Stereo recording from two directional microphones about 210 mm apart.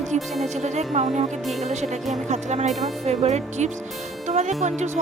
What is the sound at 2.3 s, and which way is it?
Speech, 35° right (ahead or behind).